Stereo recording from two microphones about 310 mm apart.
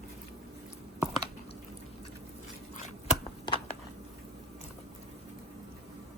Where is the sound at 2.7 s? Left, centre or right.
Left.